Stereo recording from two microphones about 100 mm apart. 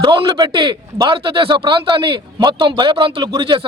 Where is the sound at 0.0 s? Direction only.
55° right (ahead or behind).